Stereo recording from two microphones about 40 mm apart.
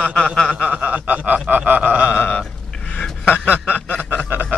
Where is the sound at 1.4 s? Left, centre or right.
Right.